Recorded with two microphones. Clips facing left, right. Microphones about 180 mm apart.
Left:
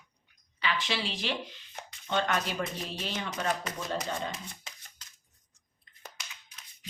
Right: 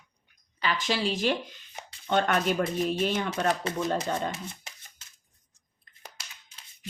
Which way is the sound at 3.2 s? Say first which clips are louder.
Right 5 dB; 30° right (ahead or behind).